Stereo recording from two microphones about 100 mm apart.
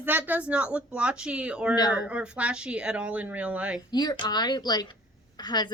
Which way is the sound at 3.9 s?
45° left (ahead or behind).